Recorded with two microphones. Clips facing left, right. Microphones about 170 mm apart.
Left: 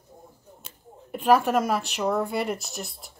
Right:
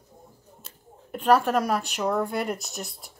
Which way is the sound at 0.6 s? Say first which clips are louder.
Left 3 dB; 5° left (ahead or behind).